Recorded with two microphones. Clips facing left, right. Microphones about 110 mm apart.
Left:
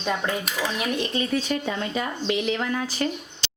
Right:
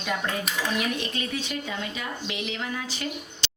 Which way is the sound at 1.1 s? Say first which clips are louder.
Left 6 dB; 40° left (ahead or behind).